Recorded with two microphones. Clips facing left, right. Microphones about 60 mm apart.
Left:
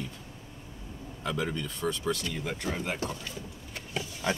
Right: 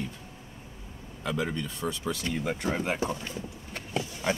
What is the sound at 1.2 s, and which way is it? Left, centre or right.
Speech, centre.